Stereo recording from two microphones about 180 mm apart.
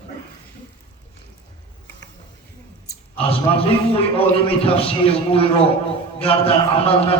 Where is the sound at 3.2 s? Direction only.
30° left (ahead or behind).